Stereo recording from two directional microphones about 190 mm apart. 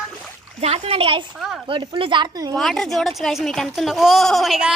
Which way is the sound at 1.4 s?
Centre (ahead or behind).